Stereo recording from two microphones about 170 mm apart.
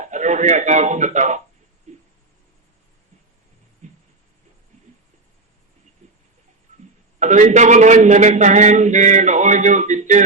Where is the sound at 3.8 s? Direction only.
45° right (ahead or behind).